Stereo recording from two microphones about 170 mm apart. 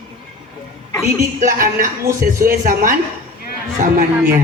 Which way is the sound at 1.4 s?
55° right (ahead or behind).